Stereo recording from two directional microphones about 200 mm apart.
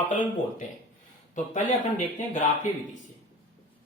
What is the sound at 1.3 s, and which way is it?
Speech, 40° left (ahead or behind).